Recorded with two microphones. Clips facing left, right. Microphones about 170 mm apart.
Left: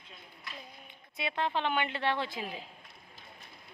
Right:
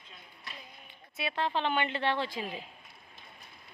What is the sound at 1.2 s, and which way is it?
A woman's voice, 15° left (ahead or behind).